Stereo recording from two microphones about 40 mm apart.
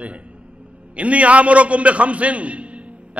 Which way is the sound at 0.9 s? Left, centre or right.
Right.